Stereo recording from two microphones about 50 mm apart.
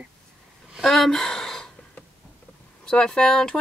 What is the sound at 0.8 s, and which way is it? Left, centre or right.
Speech, centre.